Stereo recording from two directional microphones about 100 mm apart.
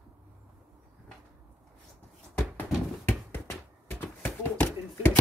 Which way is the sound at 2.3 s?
20° left (ahead or behind).